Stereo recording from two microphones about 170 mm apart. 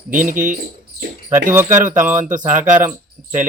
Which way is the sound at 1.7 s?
45° right (ahead or behind).